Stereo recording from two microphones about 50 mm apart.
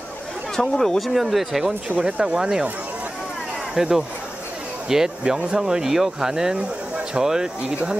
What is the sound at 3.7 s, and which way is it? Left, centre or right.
Speech, centre.